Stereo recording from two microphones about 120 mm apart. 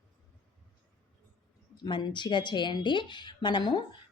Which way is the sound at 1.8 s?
40° left (ahead or behind).